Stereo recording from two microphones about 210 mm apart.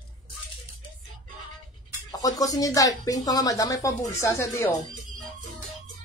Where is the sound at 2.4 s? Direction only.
15° left (ahead or behind).